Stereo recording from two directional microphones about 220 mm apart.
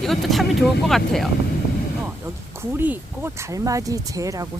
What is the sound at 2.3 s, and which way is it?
Speech, 10° right (ahead or behind).